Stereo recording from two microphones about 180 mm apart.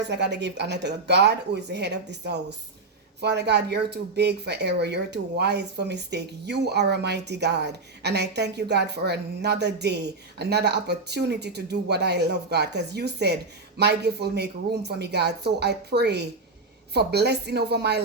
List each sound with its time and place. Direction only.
0.0 s a woman's voice: 70° right (ahead or behind)